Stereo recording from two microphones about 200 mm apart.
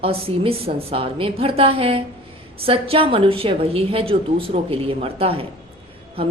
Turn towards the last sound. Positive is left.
turn(degrees=-30)  # may be behind; listen again after turning